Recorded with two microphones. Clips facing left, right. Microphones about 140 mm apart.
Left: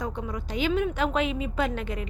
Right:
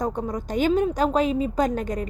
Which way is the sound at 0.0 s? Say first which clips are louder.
Right 6 dB; 45° right (ahead or behind).